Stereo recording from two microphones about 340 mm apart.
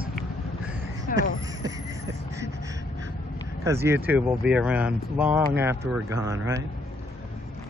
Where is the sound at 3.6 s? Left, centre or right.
Centre.